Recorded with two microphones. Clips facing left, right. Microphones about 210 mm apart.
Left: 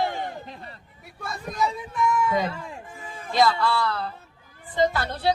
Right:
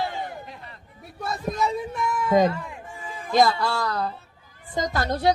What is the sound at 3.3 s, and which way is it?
A woman's voice, 45° right (ahead or behind).